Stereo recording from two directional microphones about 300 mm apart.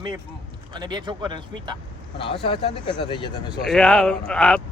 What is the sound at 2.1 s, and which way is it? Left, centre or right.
Speech, centre.